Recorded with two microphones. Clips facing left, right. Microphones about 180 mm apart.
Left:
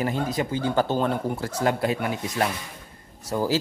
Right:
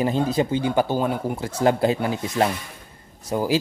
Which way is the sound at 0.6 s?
15° right (ahead or behind).